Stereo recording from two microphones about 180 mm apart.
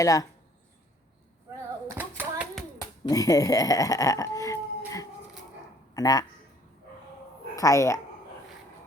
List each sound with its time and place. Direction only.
0.0 s speech: 20° left (ahead or behind)
2.0 s hands: 10° right (ahead or behind)
2.7 s speech: 20° left (ahead or behind)
5.9 s speech: 20° left (ahead or behind)
7.5 s speech: 15° left (ahead or behind)